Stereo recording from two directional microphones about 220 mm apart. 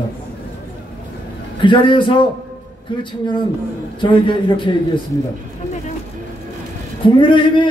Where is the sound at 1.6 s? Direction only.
20° left (ahead or behind).